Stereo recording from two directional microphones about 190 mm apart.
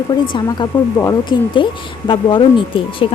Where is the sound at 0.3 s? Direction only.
20° left (ahead or behind).